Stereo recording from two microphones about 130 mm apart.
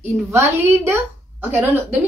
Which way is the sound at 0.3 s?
20° right (ahead or behind).